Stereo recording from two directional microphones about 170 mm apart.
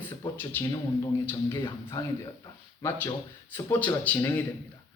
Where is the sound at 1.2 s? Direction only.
15° left (ahead or behind).